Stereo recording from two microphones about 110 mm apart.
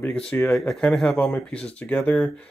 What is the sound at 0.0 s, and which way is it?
Speech, 10° left (ahead or behind).